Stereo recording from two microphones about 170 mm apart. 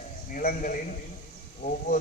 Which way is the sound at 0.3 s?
55° left (ahead or behind).